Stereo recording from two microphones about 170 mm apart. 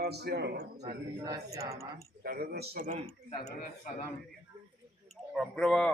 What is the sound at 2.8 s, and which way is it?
Speech, 50° right (ahead or behind).